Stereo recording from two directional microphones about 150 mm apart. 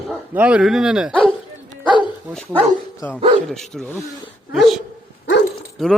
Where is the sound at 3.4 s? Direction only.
5° left (ahead or behind).